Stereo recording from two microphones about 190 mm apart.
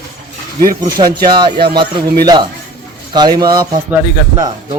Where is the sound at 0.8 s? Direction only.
25° right (ahead or behind).